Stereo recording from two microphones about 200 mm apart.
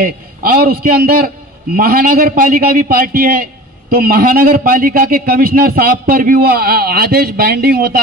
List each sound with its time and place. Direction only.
0.0 s a man's voice: 50° right (ahead or behind)